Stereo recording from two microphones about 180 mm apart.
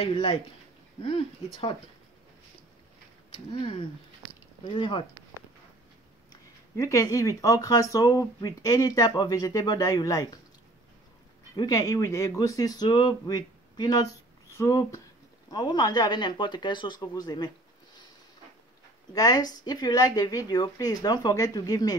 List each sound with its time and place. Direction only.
0.0 s speech: 35° left (ahead or behind)
4.7 s speech: 25° left (ahead or behind)
6.3 s speech: 15° left (ahead or behind)
11.5 s speech: 20° left (ahead or behind)
19.1 s speech: 20° left (ahead or behind)